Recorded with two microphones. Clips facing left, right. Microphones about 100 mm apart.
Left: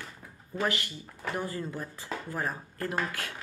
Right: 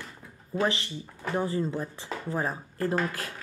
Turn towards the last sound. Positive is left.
turn(degrees=-35)  # may be behind; listen again after turning